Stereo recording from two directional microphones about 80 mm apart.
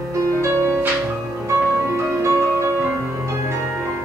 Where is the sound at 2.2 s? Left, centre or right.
Right.